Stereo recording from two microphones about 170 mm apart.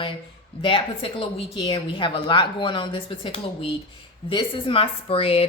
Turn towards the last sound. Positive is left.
turn(degrees=35)  # may be behind; listen again after turning